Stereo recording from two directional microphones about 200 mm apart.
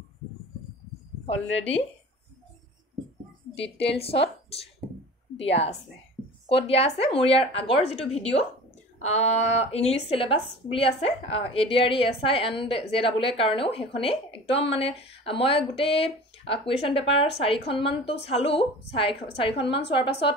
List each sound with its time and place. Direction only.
3.8 s a woman's voice: 30° left (ahead or behind)
19.5 s a woman's voice: 60° left (ahead or behind)
19.9 s a woman's voice: 25° left (ahead or behind)